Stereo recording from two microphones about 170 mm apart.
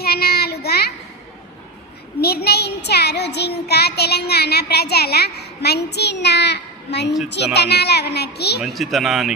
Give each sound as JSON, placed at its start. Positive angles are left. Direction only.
{"t": 0.0, "sound": "child singing", "side_deg": 65}
{"t": 2.2, "sound": "child singing", "side_deg": 70}
{"t": 7.3, "sound": "a child's voice", "side_deg": 80}
{"t": 8.6, "sound": "speech", "side_deg": 0}